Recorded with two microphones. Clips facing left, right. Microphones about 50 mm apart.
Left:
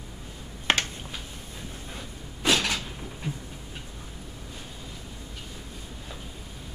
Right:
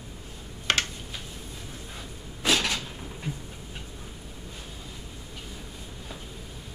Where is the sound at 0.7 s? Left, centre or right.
Left.